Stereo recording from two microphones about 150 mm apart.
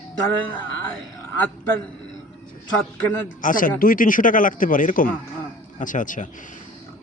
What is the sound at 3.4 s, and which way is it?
A man's voice, 65° left (ahead or behind).